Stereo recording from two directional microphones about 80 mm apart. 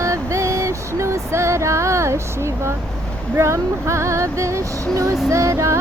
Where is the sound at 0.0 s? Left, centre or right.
Right.